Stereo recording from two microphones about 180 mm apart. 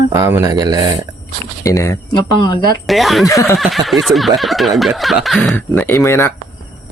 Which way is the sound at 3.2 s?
15° left (ahead or behind).